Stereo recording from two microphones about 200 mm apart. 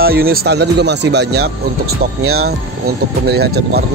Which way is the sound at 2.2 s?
90° right.